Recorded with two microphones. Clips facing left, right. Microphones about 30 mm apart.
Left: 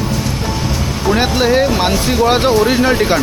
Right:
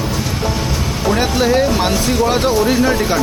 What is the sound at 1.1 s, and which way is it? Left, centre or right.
Speech, centre.